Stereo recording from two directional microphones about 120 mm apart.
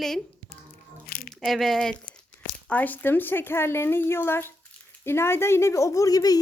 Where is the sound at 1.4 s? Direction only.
Centre (ahead or behind).